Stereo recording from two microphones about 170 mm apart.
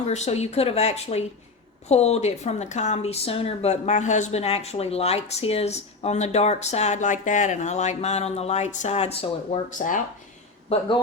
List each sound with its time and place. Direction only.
0.0 s a woman's voice: 40° left (ahead or behind)
10.7 s a woman's voice: 35° left (ahead or behind)